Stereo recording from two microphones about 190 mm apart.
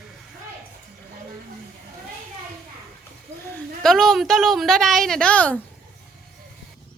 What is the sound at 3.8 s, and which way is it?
A woman's voice, centre (ahead or behind).